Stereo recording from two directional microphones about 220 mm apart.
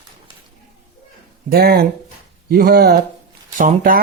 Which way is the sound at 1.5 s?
45° right (ahead or behind).